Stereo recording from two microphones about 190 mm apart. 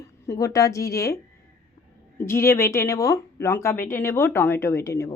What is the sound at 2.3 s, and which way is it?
A woman's voice, 15° left (ahead or behind).